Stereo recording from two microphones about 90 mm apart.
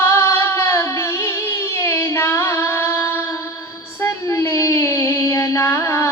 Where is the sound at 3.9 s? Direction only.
35° left (ahead or behind).